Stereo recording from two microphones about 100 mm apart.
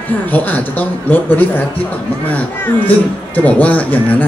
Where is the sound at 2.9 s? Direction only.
15° left (ahead or behind).